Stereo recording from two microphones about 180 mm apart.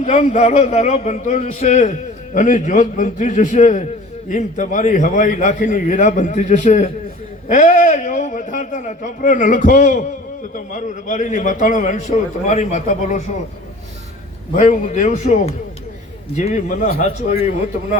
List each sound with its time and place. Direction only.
0.0 s a man's voice: 40° left (ahead or behind)
14.5 s a man's voice: 40° left (ahead or behind)